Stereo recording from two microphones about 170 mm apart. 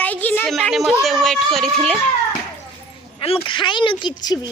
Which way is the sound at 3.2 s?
35° left (ahead or behind).